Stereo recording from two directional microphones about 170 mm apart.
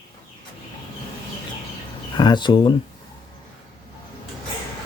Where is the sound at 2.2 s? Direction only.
25° left (ahead or behind).